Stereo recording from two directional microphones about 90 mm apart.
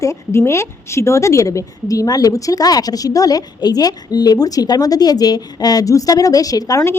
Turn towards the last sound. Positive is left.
turn(degrees=40)  # may be behind; listen again after turning